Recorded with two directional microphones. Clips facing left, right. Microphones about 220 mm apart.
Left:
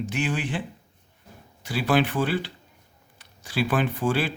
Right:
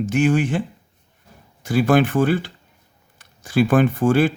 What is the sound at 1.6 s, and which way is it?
A man's voice, 45° right (ahead or behind).